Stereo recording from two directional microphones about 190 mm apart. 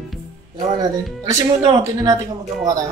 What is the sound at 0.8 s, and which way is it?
Speech, 15° right (ahead or behind).